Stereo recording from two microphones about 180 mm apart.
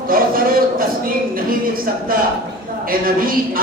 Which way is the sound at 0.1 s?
50° right (ahead or behind).